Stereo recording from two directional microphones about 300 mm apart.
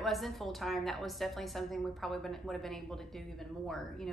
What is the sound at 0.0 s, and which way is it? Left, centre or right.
A woman's voice, centre.